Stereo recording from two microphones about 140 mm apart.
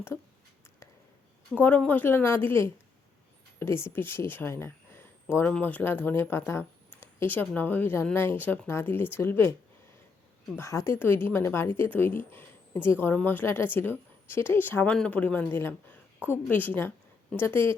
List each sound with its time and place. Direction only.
1.5 s speech: 10° left (ahead or behind)